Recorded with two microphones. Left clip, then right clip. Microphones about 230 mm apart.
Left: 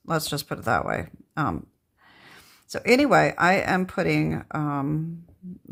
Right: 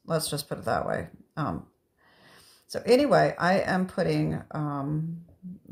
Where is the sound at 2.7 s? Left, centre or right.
Left.